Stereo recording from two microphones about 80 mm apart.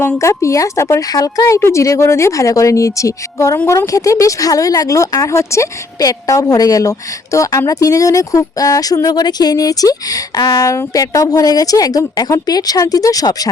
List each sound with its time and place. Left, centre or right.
0.2 s speech: left
1.0 s a woman's voice: left
6.0 s a woman's voice: left